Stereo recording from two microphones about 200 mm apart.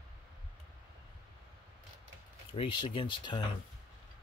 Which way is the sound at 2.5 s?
25° left (ahead or behind).